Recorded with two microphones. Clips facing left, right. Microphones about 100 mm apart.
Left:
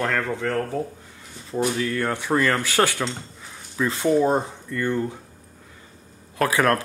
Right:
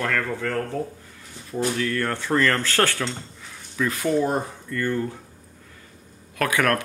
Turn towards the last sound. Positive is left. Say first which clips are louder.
# left 2 dB
turn(degrees=30)  # may be behind; listen again after turning